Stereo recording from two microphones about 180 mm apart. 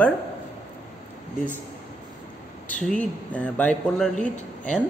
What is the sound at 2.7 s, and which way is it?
Speech, 5° left (ahead or behind).